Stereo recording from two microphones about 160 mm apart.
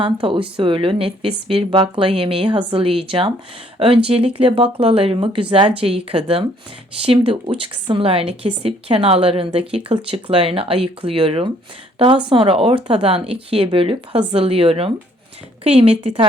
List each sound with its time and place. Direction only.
0.0 s speech: 30° right (ahead or behind)